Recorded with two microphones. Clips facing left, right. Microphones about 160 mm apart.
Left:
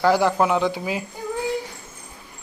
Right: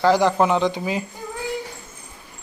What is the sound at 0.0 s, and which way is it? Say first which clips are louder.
Speech: right 1 dB; 10° left (ahead or behind).